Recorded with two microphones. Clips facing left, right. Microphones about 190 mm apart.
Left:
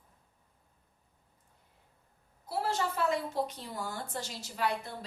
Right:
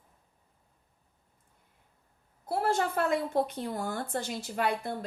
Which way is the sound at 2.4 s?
55° right (ahead or behind).